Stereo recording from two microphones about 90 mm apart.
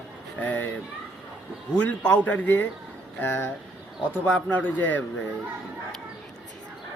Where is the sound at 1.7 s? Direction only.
15° left (ahead or behind).